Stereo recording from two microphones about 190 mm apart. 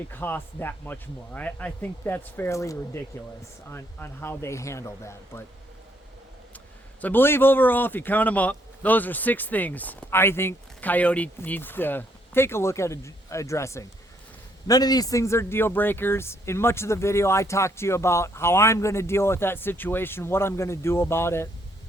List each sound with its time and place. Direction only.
0.1 s a man's voice: 10° left (ahead or behind)
7.0 s a man's voice: 10° left (ahead or behind)